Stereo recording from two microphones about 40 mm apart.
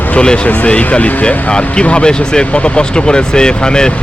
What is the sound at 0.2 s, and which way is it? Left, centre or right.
Speech, left.